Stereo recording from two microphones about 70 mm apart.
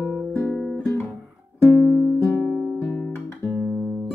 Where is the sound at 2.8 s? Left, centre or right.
Left.